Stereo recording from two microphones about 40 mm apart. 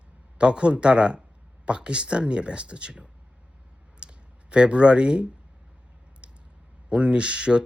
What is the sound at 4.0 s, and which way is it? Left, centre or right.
Clicking, right.